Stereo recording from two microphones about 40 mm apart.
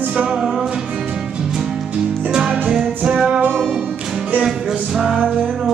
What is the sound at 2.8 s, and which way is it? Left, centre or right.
Music, right.